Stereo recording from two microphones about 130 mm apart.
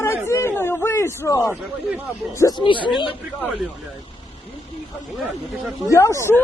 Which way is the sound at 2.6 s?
40° left (ahead or behind).